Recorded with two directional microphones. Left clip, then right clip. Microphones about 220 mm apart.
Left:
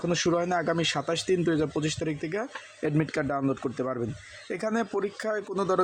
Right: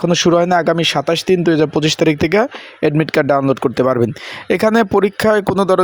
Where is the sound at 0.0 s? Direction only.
45° right (ahead or behind).